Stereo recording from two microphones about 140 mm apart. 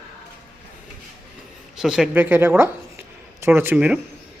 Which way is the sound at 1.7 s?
5° right (ahead or behind).